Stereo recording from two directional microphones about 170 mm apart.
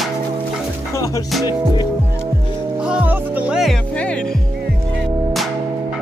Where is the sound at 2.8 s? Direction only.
5° right (ahead or behind).